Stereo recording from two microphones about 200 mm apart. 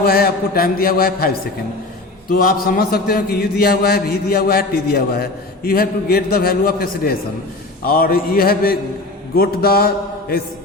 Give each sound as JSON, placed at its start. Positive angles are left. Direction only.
{"t": 0.0, "sound": "a man's voice", "side_deg": 50}